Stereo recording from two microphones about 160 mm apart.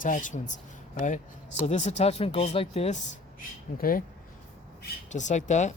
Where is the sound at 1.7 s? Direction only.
45° left (ahead or behind).